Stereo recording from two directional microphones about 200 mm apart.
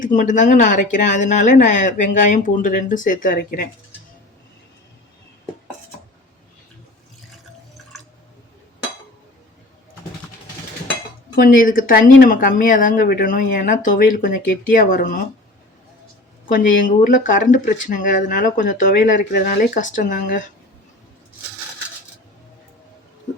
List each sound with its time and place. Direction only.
0.0 s speech: 40° left (ahead or behind)
11.3 s speech: 45° left (ahead or behind)
16.5 s speech: 40° left (ahead or behind)